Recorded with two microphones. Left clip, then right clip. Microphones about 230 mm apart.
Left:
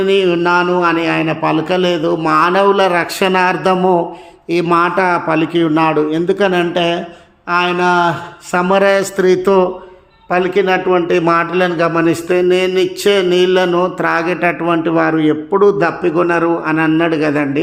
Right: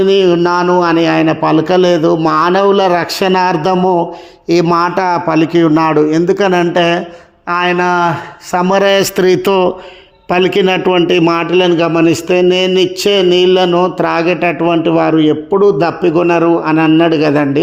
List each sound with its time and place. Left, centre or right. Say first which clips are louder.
0.0 s a man's voice: right 3 dB; right